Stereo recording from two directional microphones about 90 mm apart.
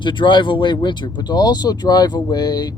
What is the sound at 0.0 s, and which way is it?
Speech, 60° left (ahead or behind).